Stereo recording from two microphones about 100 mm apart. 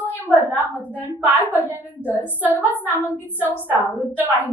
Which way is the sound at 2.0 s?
15° left (ahead or behind).